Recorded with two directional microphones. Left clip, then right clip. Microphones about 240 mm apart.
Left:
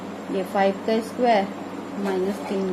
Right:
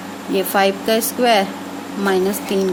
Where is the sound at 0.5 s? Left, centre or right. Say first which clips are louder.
Right 5 dB; right.